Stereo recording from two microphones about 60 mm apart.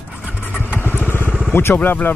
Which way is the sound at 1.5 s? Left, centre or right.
Left.